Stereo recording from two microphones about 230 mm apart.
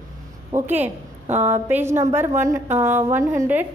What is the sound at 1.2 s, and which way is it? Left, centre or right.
Speech, right.